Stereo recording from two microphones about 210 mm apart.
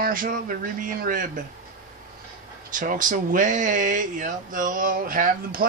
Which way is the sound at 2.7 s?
40° right (ahead or behind).